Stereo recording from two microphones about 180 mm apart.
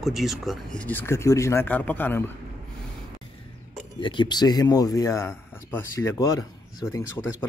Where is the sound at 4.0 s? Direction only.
25° left (ahead or behind).